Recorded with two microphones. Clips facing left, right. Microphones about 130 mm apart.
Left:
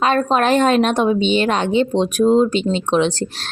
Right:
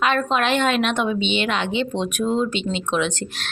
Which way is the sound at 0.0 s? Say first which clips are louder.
Left 4 dB; 40° left (ahead or behind).